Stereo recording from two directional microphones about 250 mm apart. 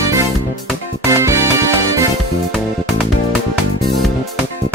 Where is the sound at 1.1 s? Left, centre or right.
Centre.